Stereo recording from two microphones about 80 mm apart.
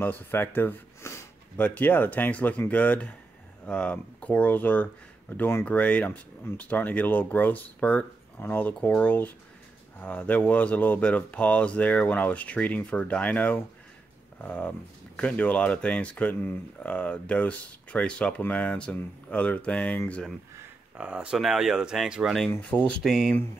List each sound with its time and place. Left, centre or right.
0.0 s speech: left
5.7 s speech: centre
20.9 s speech: centre
22.6 s speech: centre
23.0 s speech: centre